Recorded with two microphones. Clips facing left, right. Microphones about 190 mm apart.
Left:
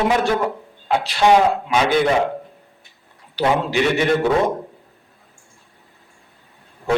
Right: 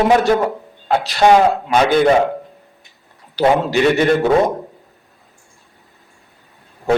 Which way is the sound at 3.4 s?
40° right (ahead or behind).